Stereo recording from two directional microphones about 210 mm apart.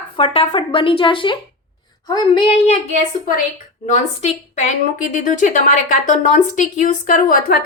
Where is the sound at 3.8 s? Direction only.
35° left (ahead or behind).